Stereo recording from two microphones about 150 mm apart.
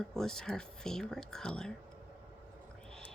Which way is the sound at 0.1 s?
5° left (ahead or behind).